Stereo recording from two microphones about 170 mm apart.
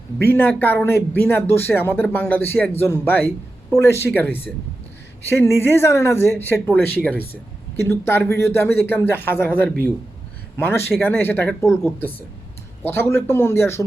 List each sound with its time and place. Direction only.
0.3 s speech: 10° left (ahead or behind)
12.8 s speech: 15° left (ahead or behind)